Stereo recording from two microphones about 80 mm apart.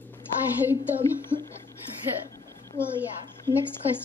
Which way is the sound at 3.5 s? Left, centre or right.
Left.